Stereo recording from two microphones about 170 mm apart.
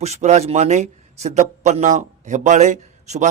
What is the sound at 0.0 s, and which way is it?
A man's voice, 40° right (ahead or behind).